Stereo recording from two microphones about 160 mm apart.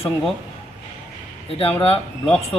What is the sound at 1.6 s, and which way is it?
Speech, 35° left (ahead or behind).